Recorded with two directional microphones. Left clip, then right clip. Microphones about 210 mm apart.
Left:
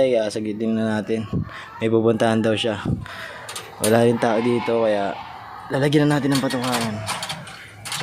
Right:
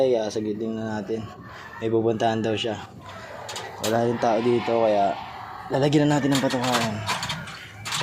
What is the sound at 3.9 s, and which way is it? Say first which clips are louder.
Speech: left 4 dB; 35° left (ahead or behind).